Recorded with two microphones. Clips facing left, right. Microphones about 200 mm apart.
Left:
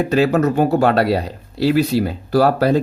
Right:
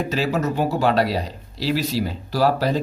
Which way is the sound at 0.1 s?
60° left (ahead or behind).